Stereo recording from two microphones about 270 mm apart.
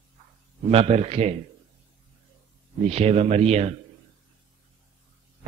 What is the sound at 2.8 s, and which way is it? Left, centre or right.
Speech, right.